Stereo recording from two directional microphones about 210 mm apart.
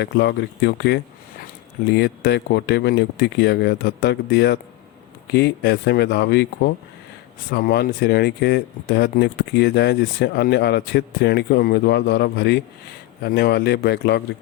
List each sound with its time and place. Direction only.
0.0 s speech: 50° left (ahead or behind)